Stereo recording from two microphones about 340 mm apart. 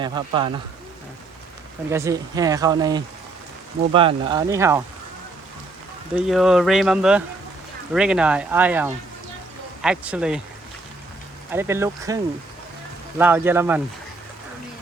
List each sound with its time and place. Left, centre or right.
0.0 s speech: centre
1.9 s speech: centre
6.1 s speech: centre
11.5 s speech: centre